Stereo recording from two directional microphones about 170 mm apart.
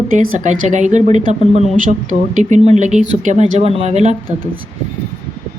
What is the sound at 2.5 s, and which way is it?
Speech, 45° right (ahead or behind).